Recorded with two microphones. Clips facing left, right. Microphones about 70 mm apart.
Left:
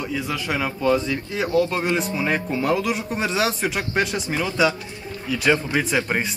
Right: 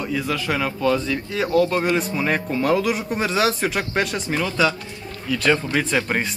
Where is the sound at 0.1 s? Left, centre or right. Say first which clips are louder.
Right 4 dB; centre.